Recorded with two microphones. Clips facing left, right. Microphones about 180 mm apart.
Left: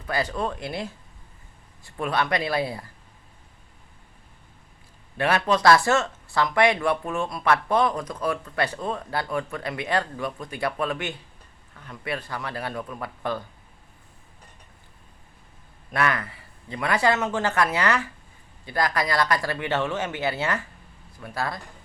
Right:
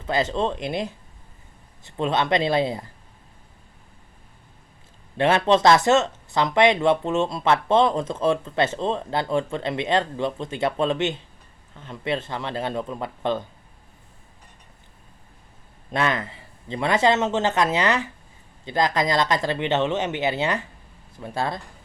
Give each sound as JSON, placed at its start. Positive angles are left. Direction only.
{"t": 0.0, "sound": "speech", "side_deg": -25}
{"t": 5.1, "sound": "speech", "side_deg": -25}
{"t": 15.9, "sound": "speech", "side_deg": -25}